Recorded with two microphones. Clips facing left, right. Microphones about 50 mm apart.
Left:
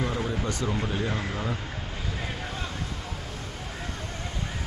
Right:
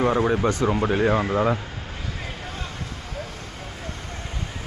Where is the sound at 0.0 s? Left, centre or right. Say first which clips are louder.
Right 9 dB; right.